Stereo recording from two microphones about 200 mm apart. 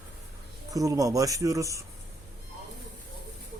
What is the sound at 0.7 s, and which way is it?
Speech, 15° right (ahead or behind).